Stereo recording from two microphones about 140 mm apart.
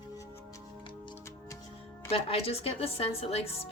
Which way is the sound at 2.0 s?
45° left (ahead or behind).